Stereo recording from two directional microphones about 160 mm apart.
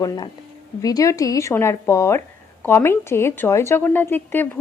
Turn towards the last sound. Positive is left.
turn(degrees=10)  # may be behind; listen again after turning